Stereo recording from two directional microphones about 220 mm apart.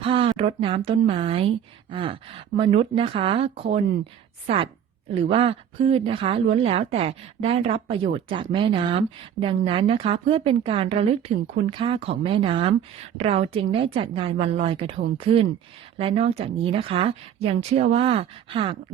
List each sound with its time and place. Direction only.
0.0 s speech: 25° right (ahead or behind)